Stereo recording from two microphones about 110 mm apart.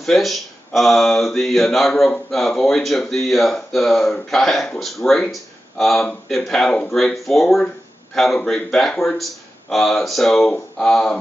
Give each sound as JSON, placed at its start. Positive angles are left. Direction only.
{"t": 0.0, "sound": "speech", "side_deg": 0}